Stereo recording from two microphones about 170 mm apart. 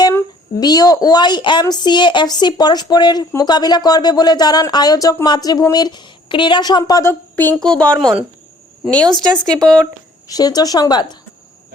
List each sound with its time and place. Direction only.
0.0 s speech: 20° left (ahead or behind); by 8.2 s centre (ahead or behind)
9.5 s speech: 5° left (ahead or behind)
10.2 s speech: 20° left (ahead or behind)